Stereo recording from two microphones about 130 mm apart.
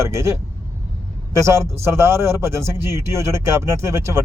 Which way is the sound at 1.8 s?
20° right (ahead or behind).